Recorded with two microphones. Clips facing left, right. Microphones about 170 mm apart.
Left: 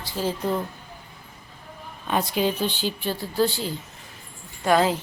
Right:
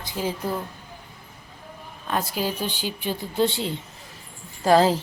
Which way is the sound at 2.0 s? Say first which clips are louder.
Left 3 dB; centre (ahead or behind).